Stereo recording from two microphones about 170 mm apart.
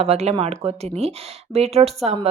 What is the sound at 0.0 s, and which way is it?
A woman's voice, 40° right (ahead or behind).